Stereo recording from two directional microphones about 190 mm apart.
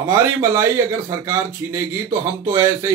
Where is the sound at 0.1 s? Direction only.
15° right (ahead or behind).